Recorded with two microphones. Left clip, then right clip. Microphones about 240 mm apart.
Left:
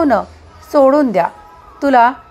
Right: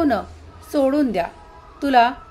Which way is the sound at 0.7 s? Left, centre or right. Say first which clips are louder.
Left 9 dB; centre.